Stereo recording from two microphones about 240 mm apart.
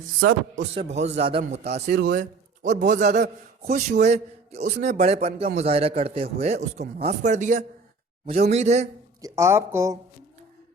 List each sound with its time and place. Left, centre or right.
0.5 s speech: right
2.0 s a man's voice: right
9.2 s speech: centre